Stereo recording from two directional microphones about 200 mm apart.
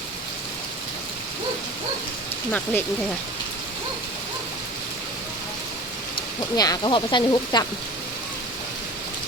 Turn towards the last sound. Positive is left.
turn(degrees=20)  # may be behind; listen again after turning